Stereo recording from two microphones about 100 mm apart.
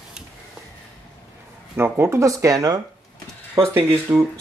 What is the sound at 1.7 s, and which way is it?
Speech, 25° right (ahead or behind).